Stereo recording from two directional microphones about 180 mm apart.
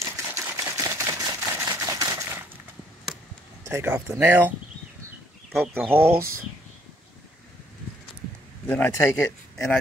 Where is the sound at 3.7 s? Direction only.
10° right (ahead or behind).